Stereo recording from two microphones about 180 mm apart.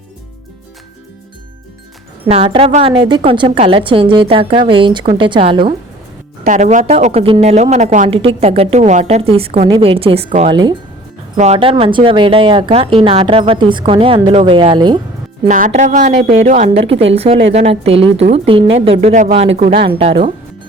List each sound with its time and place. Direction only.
2.2 s a woman's voice: 30° right (ahead or behind)
6.4 s a woman's voice: 45° right (ahead or behind); by 14.9 s 25° right (ahead or behind)
15.4 s speech: 45° right (ahead or behind)
20.0 s speech: 35° right (ahead or behind)